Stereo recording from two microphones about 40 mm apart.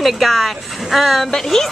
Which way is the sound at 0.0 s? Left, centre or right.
Centre.